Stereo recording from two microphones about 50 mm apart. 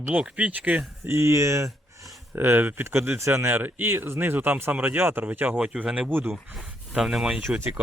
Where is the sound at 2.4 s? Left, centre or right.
Right.